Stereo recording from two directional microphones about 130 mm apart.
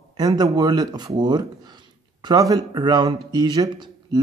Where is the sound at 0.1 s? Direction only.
30° right (ahead or behind).